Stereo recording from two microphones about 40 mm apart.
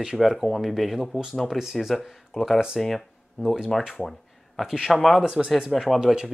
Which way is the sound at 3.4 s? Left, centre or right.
Centre.